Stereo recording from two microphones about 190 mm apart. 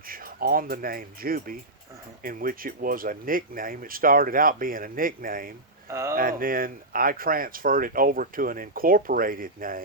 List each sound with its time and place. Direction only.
0.1 s speech: 50° right (ahead or behind)
5.9 s speech: 15° right (ahead or behind)
6.1 s speech: 50° right (ahead or behind)